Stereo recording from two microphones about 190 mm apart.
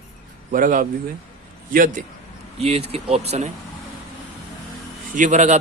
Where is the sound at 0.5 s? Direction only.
45° right (ahead or behind).